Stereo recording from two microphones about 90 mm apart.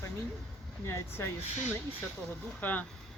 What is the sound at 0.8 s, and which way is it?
Speech, 30° left (ahead or behind).